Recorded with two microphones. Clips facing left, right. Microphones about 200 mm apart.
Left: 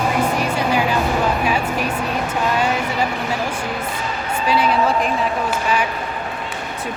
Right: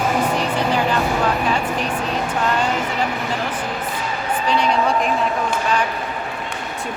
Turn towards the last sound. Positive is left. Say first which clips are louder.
# left 1 dB
turn(degrees=5)  # may be behind; listen again after turning